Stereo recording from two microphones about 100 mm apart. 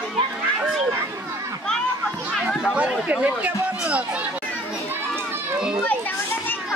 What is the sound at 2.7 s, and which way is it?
Speech, 15° right (ahead or behind).